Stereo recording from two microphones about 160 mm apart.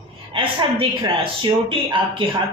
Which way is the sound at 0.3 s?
35° right (ahead or behind).